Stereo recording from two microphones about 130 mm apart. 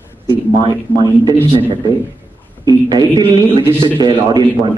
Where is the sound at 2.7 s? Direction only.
30° right (ahead or behind).